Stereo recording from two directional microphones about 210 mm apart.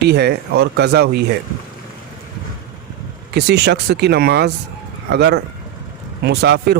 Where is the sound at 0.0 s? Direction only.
50° right (ahead or behind).